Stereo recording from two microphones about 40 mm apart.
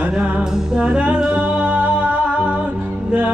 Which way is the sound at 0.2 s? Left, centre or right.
Right.